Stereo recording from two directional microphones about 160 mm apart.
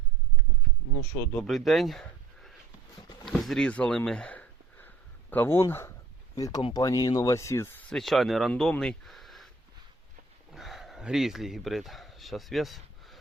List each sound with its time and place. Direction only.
1.2 s speech: 10° left (ahead or behind)
1.5 s speech: centre (ahead or behind)
3.2 s a sound: centre (ahead or behind)
5.3 s speech: 15° left (ahead or behind)
7.9 s speech: centre (ahead or behind)
10.5 s speech: centre (ahead or behind)